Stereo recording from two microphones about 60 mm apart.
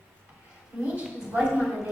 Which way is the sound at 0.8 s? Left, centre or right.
Centre.